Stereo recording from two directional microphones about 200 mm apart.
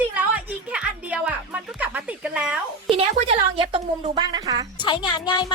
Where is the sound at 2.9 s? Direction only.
30° right (ahead or behind).